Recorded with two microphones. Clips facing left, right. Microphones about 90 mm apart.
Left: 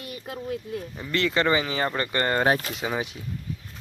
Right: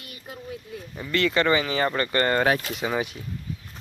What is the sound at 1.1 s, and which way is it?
Speech, 25° left (ahead or behind).